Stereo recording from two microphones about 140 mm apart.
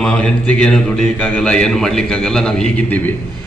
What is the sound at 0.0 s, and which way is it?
A man's voice, 5° left (ahead or behind).